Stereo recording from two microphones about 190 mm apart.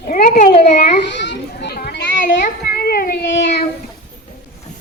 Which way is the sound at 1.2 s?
65° left (ahead or behind).